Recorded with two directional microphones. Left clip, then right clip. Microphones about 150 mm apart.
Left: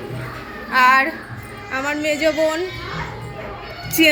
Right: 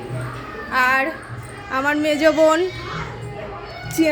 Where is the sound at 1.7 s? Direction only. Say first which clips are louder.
Right 2 dB; 35° right (ahead or behind).